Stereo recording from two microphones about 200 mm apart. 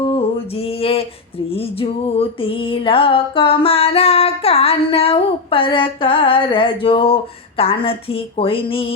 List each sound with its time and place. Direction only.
0.0 s mantra: 25° left (ahead or behind)
1.5 s music: 30° left (ahead or behind)